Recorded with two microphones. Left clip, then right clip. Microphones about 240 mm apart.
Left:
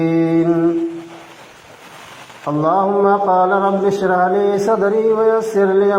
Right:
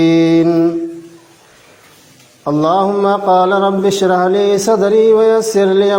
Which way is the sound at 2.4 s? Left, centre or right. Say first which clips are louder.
Right 3 dB; right.